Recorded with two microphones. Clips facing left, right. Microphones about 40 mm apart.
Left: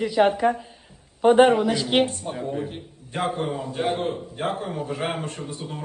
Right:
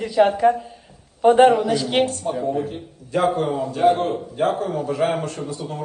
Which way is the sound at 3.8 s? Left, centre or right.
Right.